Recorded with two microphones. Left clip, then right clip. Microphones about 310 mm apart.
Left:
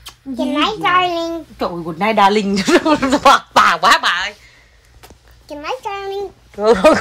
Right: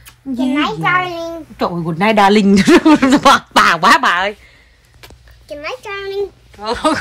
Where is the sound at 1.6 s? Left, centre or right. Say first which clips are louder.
Right 3 dB; right.